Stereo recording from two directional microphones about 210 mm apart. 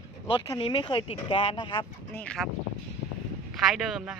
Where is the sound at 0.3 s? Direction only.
20° left (ahead or behind).